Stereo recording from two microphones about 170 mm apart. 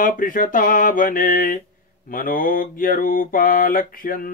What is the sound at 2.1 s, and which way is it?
Speech, 55° left (ahead or behind).